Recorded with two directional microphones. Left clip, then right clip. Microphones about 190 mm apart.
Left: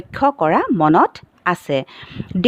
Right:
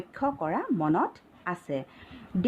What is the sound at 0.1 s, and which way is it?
Speech, 50° left (ahead or behind).